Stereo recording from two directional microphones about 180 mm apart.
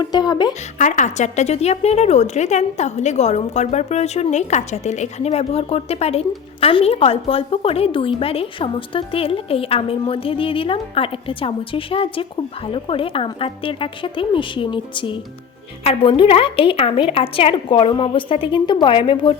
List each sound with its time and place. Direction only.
0.0 s a woman's voice: 20° left (ahead or behind)
0.8 s a woman's voice: 45° left (ahead or behind); by 19.4 s 30° left (ahead or behind)